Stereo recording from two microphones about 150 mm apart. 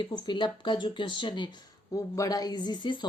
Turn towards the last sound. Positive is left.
turn(degrees=30)  # may be behind; listen again after turning